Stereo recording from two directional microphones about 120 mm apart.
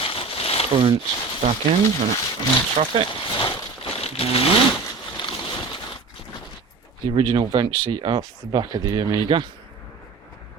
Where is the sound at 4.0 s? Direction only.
55° left (ahead or behind).